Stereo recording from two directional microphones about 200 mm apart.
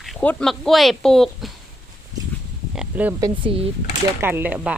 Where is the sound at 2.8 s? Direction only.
10° right (ahead or behind).